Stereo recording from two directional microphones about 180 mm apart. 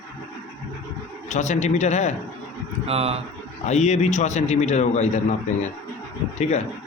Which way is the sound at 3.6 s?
40° left (ahead or behind).